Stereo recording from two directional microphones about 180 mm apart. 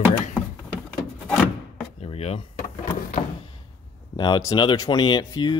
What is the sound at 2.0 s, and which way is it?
Vehicle, 35° left (ahead or behind).